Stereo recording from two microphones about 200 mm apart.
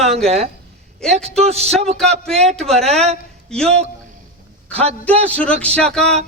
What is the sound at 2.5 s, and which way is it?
Speech, centre (ahead or behind).